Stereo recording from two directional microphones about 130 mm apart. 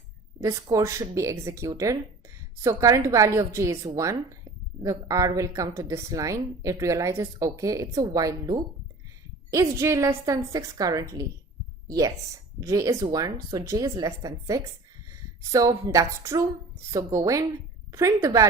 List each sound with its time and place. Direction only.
0.4 s a woman's voice: 25° right (ahead or behind)